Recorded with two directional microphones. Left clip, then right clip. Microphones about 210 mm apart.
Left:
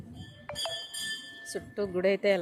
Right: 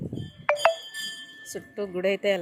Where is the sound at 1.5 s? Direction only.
Centre (ahead or behind).